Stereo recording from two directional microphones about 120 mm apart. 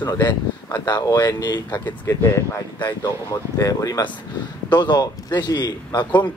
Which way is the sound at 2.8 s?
40° left (ahead or behind).